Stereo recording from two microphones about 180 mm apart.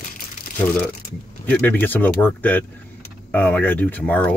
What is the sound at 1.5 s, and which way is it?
Speech, 10° left (ahead or behind).